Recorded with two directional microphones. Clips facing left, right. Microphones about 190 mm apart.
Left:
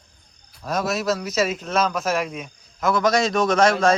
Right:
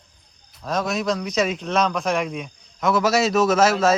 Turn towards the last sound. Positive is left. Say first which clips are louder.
# even
turn(degrees=-5)  # may be behind; listen again after turning